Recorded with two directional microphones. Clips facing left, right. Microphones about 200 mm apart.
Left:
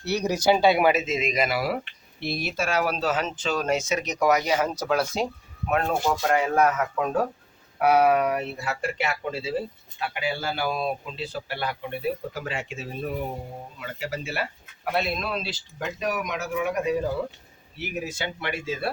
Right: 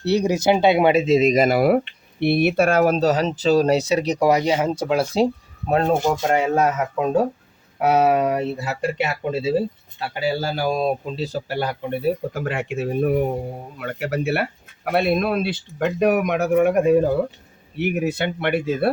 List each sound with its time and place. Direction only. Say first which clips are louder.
0.0 s speech: right 5 dB; 30° right (ahead or behind); by 1.8 s 50° right (ahead or behind)
2.2 s speech: right 11 dB; 60° right (ahead or behind); by 9.6 s 25° right (ahead or behind)
10.0 s a man's voice: right 6 dB; 35° right (ahead or behind); by 18.9 s 55° right (ahead or behind)